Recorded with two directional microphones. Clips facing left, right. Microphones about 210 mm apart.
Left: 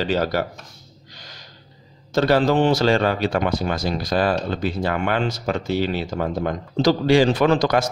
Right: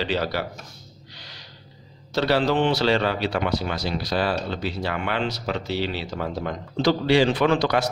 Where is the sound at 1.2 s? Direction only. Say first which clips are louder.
Left 3 dB; 45° left (ahead or behind).